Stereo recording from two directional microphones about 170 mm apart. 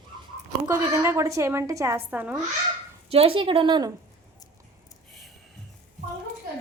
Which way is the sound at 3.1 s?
35° right (ahead or behind).